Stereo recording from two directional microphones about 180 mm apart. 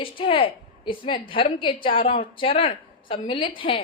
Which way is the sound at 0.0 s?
30° left (ahead or behind).